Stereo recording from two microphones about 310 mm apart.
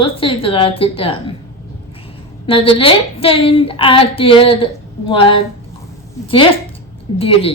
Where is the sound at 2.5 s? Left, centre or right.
Centre.